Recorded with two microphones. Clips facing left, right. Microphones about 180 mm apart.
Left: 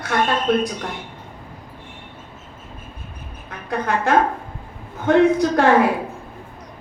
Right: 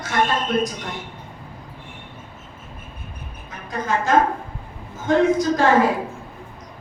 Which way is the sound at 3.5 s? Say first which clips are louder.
Left 2 dB; 60° left (ahead or behind).